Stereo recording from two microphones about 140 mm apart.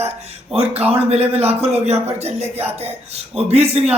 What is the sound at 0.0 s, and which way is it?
A man's voice, 45° right (ahead or behind).